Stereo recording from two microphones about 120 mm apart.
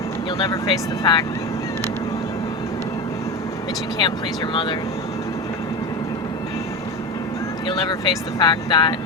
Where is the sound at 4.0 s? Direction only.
40° left (ahead or behind).